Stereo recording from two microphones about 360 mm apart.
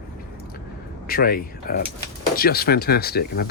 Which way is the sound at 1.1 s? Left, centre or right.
Left.